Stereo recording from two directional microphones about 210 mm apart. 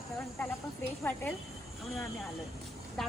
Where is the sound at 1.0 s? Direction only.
10° left (ahead or behind).